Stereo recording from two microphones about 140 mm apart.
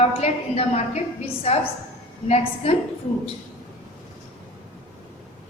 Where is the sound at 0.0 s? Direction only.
50° left (ahead or behind).